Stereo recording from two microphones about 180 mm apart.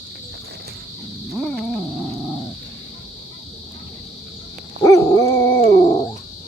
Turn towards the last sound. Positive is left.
turn(degrees=30)  # may be behind; listen again after turning